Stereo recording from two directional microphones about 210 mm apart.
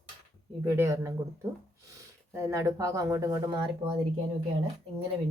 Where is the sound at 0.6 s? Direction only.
15° right (ahead or behind).